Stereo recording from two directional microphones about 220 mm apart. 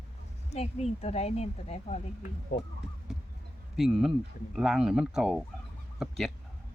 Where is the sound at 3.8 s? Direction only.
Centre (ahead or behind).